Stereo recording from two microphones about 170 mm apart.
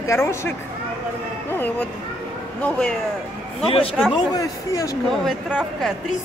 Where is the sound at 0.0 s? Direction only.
15° left (ahead or behind).